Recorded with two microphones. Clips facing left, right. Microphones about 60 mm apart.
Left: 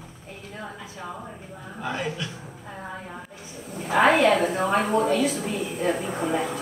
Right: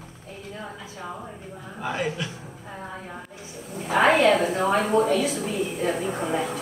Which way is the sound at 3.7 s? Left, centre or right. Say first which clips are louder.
Even; centre.